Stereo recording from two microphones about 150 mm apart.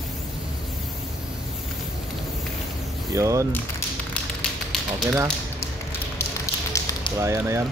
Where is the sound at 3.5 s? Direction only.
10° left (ahead or behind).